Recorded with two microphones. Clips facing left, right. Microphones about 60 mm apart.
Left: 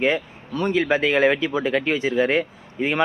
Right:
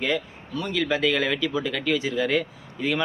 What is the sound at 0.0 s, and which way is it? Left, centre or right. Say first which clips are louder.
Speech: left 5 dB; left.